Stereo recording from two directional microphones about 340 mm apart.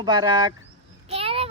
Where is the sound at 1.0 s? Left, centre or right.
Centre.